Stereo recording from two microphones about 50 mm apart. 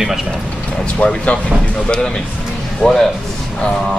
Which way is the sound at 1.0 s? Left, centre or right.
Left.